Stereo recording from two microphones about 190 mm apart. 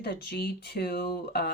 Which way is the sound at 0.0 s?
55° left (ahead or behind).